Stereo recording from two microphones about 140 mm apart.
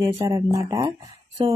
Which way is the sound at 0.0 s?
25° right (ahead or behind).